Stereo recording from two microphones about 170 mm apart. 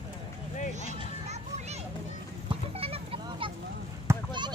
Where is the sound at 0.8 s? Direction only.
40° right (ahead or behind).